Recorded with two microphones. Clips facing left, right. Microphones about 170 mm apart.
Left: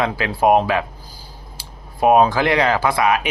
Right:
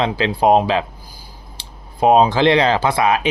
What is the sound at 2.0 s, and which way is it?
Speech, 20° right (ahead or behind).